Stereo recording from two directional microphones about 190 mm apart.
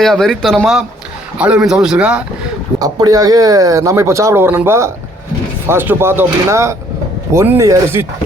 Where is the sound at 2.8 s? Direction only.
20° right (ahead or behind).